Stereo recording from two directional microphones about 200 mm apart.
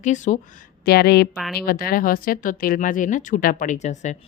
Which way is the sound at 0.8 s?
50° left (ahead or behind).